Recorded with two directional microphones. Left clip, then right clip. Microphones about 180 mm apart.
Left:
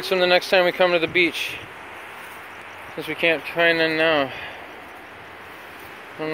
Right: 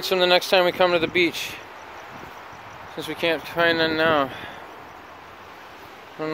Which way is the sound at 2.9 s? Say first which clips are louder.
Left 3 dB; 15° right (ahead or behind).